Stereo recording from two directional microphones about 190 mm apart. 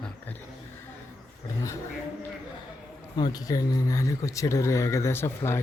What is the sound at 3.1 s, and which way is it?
Speech, 20° left (ahead or behind).